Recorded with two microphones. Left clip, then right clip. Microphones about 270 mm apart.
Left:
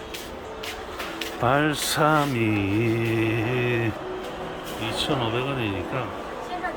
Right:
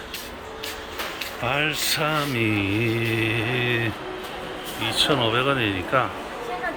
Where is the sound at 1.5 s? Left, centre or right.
Left.